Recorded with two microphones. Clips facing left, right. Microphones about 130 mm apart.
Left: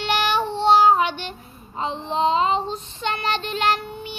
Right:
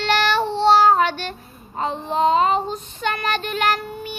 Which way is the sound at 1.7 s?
50° right (ahead or behind).